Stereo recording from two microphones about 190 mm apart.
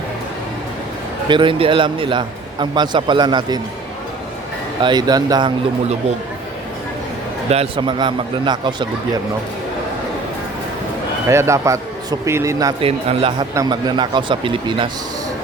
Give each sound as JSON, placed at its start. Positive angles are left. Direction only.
{"t": 1.3, "sound": "speech", "side_deg": -25}
{"t": 4.8, "sound": "speech", "side_deg": -25}
{"t": 7.5, "sound": "speech", "side_deg": -30}
{"t": 11.3, "sound": "a man's voice", "side_deg": -15}
{"t": 12.8, "sound": "speech", "side_deg": -30}
{"t": 13.5, "sound": "speech", "side_deg": -20}